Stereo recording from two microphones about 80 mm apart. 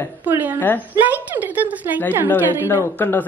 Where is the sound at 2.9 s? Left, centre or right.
Left.